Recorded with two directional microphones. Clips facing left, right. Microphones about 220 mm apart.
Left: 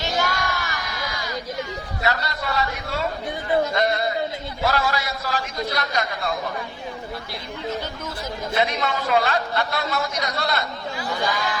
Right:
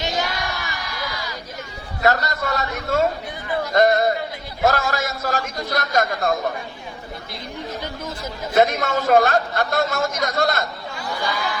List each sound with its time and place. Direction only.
0.0 s music: 20° right (ahead or behind)
2.0 s a sound: 45° right (ahead or behind)
3.7 s a man's voice: 45° right (ahead or behind)
8.5 s a man's voice: 45° right (ahead or behind)